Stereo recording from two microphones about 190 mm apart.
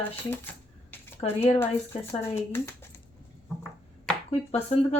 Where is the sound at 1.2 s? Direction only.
30° left (ahead or behind).